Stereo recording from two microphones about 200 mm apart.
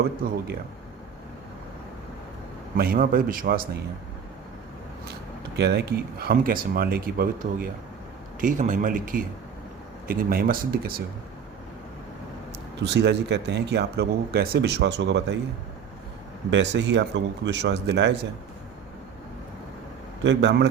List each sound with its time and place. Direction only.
0.2 s speech: 45° right (ahead or behind)
2.7 s speech: 50° right (ahead or behind)
5.5 s speech: 55° right (ahead or behind)
12.8 s speech: 60° right (ahead or behind)
16.5 s speech: 65° right (ahead or behind)
20.2 s speech: 60° right (ahead or behind)